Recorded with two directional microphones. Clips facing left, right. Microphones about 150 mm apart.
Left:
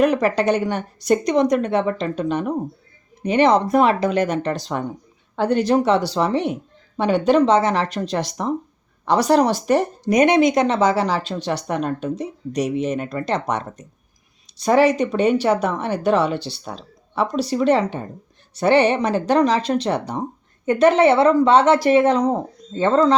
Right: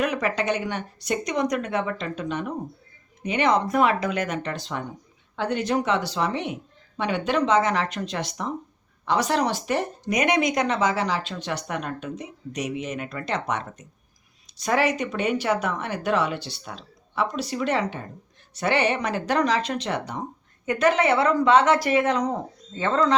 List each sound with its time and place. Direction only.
0.0 s speech: 35° left (ahead or behind)
10.1 s speech: 30° left (ahead or behind)